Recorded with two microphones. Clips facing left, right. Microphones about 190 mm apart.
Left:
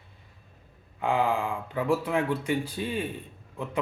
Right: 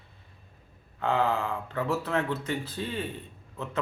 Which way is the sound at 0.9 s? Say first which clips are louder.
Left 1 dB; 10° left (ahead or behind).